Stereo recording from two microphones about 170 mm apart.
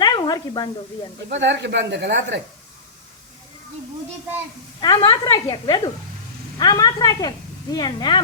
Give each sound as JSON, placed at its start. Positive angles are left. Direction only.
{"t": 0.0, "sound": "snake", "side_deg": 25}
{"t": 1.3, "sound": "speech", "side_deg": -90}
{"t": 4.8, "sound": "speech", "side_deg": 25}